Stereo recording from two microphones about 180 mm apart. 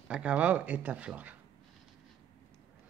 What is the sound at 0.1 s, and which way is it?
Speech, 5° right (ahead or behind).